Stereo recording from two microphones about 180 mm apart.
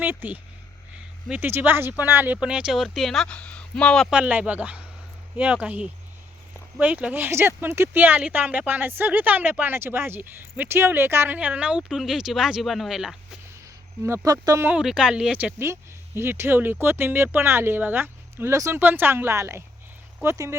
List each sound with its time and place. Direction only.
0.0 s speech: 10° right (ahead or behind)
14.3 s speech: 20° right (ahead or behind)